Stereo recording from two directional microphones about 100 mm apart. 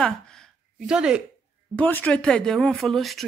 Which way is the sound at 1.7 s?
15° left (ahead or behind).